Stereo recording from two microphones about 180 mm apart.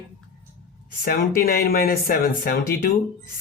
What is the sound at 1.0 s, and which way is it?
Speech, 55° left (ahead or behind).